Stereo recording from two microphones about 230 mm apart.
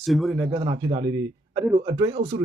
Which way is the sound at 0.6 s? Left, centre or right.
Right.